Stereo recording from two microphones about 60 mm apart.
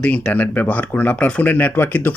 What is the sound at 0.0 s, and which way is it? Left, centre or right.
Speech, left.